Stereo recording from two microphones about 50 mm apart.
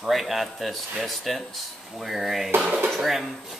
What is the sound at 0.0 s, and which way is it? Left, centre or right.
Speech, centre.